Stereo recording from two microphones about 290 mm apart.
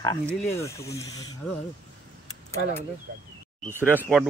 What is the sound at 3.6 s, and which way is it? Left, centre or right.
Speech, centre.